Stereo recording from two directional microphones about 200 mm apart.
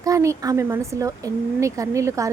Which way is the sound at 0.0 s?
15° right (ahead or behind).